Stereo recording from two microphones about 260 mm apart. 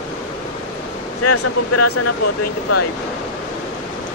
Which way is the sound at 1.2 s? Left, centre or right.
Left.